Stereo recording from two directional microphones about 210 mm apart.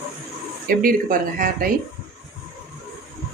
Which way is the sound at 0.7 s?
40° right (ahead or behind).